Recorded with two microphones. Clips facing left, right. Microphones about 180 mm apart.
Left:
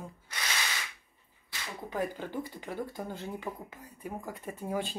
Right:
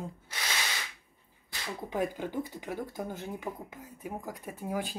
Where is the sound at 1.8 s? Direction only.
15° right (ahead or behind).